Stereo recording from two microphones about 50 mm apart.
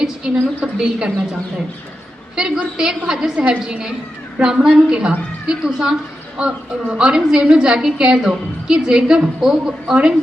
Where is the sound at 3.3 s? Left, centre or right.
Right.